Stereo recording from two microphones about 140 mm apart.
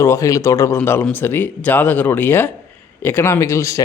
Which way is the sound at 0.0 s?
20° left (ahead or behind).